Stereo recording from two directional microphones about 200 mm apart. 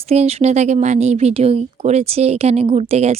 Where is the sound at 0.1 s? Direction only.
30° right (ahead or behind).